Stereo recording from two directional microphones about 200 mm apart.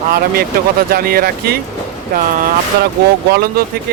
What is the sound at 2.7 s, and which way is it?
Speech, 50° right (ahead or behind).